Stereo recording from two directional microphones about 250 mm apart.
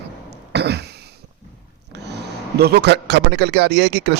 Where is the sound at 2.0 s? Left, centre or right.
Right.